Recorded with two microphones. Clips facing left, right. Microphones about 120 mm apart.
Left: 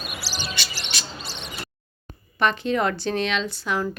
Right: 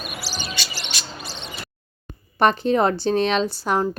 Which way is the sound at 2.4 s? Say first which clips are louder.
Right 4 dB; 40° right (ahead or behind).